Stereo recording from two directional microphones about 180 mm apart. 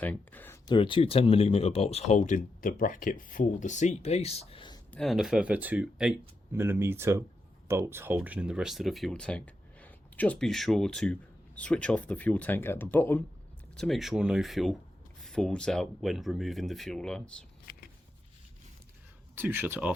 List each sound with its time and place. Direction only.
0.0 s speech: 10° left (ahead or behind)
0.7 s speech: 30° left (ahead or behind)
4.9 s speech: centre (ahead or behind)
19.4 s speech: 10° right (ahead or behind)